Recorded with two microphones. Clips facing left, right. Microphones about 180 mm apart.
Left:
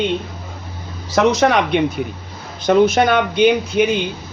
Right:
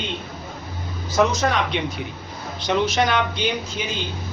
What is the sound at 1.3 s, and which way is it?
Speech, 70° left (ahead or behind).